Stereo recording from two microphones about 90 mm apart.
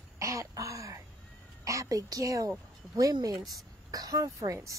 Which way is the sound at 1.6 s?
40° right (ahead or behind).